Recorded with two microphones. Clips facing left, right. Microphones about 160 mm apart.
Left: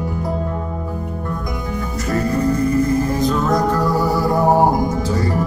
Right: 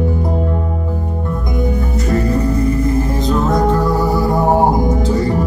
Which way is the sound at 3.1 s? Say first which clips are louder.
Right 2 dB; 20° right (ahead or behind).